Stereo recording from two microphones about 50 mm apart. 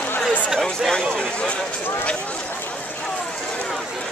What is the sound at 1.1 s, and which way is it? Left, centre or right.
Speech, centre.